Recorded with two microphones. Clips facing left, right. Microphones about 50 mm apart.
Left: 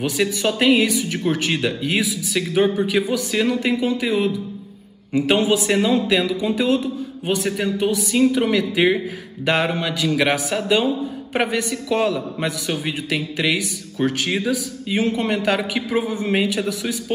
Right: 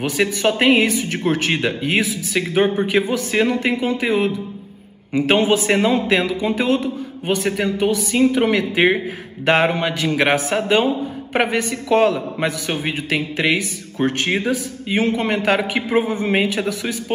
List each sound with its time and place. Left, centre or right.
0.0 s a man's voice: right